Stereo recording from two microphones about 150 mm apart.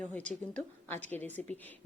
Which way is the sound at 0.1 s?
10° left (ahead or behind).